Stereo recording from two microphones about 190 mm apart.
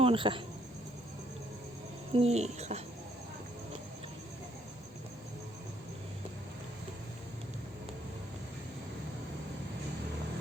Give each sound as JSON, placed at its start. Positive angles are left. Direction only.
{"t": 0.0, "sound": "speech", "side_deg": -25}
{"t": 2.1, "sound": "speech", "side_deg": -35}